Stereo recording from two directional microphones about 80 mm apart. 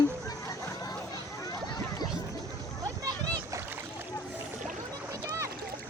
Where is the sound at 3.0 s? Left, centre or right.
Right.